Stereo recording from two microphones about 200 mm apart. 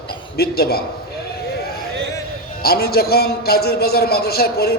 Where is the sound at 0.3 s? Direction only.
50° left (ahead or behind).